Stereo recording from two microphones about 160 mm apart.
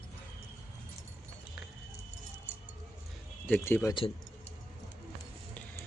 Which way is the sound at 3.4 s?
15° left (ahead or behind).